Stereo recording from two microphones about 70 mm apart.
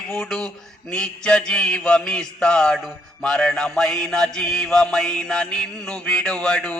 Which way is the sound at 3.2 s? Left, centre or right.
Centre.